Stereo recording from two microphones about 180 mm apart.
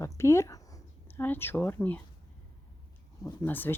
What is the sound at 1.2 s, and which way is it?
Speech, 10° left (ahead or behind).